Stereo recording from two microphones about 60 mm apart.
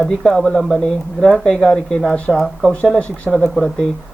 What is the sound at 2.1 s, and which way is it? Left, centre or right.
Speech, left.